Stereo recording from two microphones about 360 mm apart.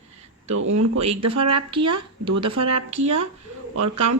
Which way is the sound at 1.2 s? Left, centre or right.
Right.